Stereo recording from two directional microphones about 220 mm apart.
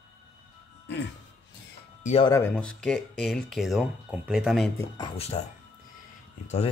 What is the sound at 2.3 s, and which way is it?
Speech, 5° left (ahead or behind).